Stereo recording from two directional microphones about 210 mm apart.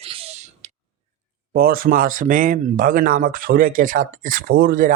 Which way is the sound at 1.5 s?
45° right (ahead or behind).